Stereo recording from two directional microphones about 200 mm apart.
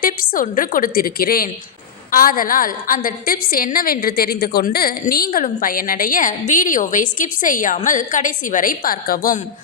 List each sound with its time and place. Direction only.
0.0 s a woman's voice: 45° left (ahead or behind)